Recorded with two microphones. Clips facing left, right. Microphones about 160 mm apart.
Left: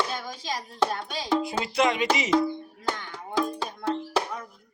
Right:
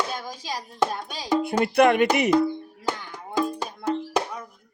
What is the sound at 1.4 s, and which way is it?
Speech, 60° right (ahead or behind).